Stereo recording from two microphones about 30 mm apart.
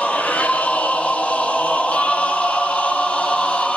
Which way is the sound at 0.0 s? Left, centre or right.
Left.